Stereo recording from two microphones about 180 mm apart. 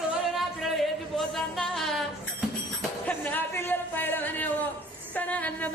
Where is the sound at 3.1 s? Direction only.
10° left (ahead or behind).